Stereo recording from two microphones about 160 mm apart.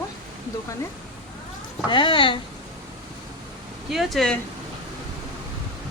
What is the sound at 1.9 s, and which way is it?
Speech, 30° left (ahead or behind).